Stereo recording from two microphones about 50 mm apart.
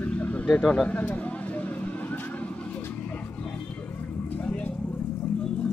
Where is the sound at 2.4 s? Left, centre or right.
Left.